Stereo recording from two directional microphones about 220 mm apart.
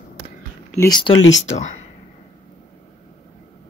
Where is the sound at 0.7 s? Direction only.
20° left (ahead or behind).